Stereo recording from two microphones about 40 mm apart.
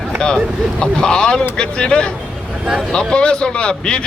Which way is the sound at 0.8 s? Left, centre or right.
Left.